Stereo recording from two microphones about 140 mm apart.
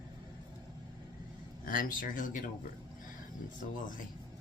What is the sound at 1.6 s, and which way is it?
Speech, 80° left.